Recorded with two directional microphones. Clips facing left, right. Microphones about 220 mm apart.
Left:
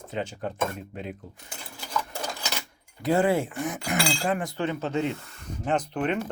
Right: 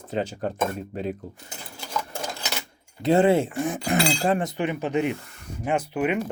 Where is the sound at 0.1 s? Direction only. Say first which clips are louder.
Right 5 dB; 40° right (ahead or behind).